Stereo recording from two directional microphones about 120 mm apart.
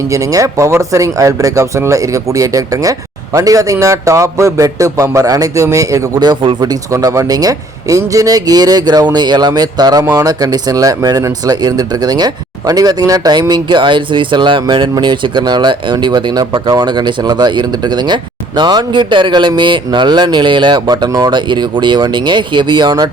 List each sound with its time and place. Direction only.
0.1 s a man's voice: 30° right (ahead or behind)